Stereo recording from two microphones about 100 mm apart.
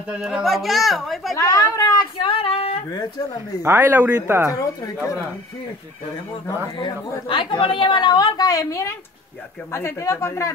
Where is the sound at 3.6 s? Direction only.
25° right (ahead or behind).